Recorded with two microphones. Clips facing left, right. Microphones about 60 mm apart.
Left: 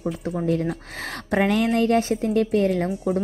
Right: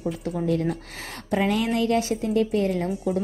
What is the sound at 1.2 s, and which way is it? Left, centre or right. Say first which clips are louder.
Speech: left 3 dB; left.